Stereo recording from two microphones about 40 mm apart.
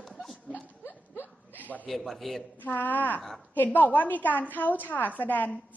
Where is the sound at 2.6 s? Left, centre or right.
Left.